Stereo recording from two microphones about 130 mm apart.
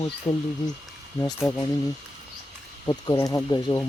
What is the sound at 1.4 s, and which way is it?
Speech, centre (ahead or behind).